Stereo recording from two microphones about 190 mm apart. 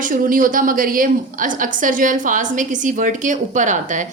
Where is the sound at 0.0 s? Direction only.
45° right (ahead or behind).